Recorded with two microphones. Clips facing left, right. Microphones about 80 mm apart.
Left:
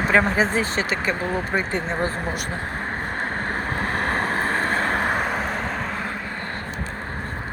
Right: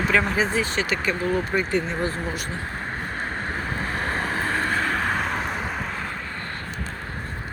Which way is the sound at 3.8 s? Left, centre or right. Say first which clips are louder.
Left 4 dB; left.